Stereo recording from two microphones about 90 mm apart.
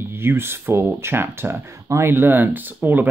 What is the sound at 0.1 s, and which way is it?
Speech, 25° right (ahead or behind).